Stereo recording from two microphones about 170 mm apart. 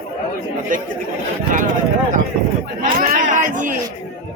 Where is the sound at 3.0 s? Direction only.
50° right (ahead or behind).